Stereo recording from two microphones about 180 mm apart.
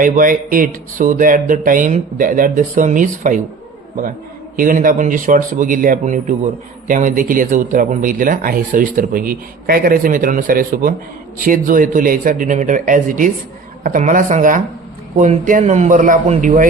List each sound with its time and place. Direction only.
0.0 s a man's voice: 50° right (ahead or behind)
4.5 s a man's voice: 50° right (ahead or behind)